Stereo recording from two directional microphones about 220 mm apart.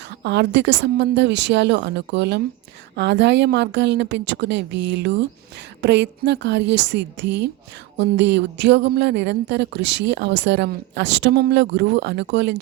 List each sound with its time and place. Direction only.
0.2 s speech: 50° right (ahead or behind)